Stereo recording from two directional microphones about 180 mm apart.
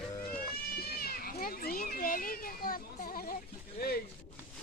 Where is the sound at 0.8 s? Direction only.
60° left (ahead or behind).